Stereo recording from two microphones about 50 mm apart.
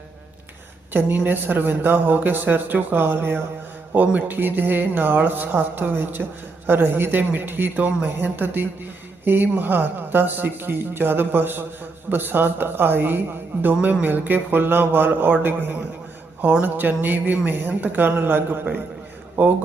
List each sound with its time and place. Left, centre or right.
0.9 s speech: right